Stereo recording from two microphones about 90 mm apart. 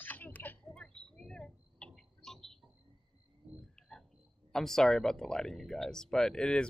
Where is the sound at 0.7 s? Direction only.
10° left (ahead or behind).